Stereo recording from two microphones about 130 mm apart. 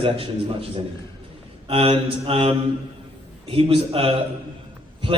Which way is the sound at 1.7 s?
45° right (ahead or behind).